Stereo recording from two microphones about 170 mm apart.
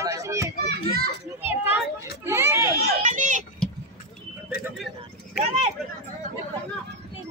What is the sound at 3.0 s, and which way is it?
Speech, 45° right (ahead or behind).